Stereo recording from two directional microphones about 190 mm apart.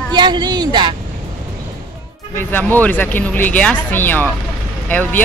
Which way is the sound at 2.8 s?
10° left (ahead or behind).